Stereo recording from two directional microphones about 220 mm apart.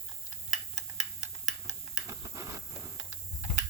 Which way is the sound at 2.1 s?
15° right (ahead or behind).